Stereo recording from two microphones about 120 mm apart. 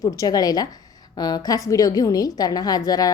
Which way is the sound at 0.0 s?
30° left (ahead or behind).